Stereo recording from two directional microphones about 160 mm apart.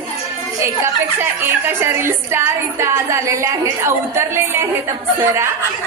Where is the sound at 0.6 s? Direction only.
15° right (ahead or behind).